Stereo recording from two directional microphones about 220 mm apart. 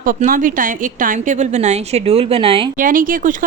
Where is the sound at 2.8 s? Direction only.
40° right (ahead or behind).